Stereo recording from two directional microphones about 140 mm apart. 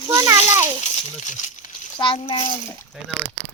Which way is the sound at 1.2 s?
65° left (ahead or behind).